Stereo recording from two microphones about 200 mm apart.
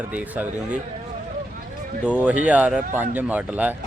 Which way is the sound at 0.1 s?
5° right (ahead or behind).